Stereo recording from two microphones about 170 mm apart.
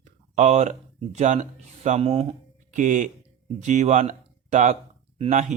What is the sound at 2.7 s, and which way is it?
Speech, 50° right (ahead or behind).